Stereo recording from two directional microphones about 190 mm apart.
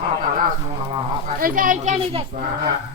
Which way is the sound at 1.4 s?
45° right (ahead or behind).